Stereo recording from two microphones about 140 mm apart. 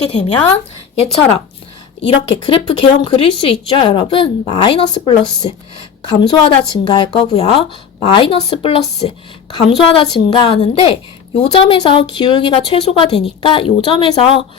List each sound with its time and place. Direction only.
0.0 s a woman's voice: 45° left (ahead or behind)
7.3 s a woman's voice: 50° left (ahead or behind)